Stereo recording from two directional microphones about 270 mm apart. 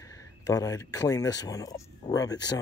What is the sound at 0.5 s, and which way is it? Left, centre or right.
Speech, centre.